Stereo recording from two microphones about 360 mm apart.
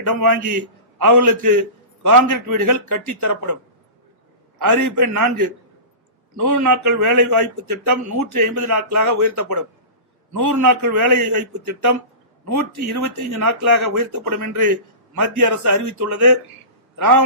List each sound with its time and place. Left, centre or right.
0.1 s a man's voice: right
4.6 s a man's voice: right
12.5 s a man's voice: right